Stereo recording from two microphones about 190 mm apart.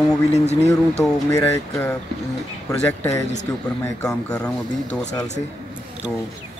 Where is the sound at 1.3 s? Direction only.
10° left (ahead or behind).